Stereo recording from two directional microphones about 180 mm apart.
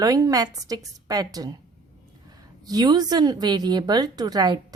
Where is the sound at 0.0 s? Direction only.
20° right (ahead or behind).